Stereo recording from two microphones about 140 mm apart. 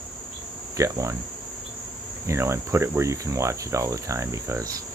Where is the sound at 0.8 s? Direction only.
20° right (ahead or behind).